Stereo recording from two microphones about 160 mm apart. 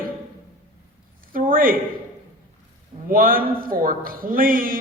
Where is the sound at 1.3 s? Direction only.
60° right (ahead or behind).